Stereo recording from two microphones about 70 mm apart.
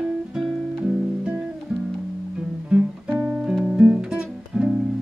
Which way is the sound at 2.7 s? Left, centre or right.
Centre.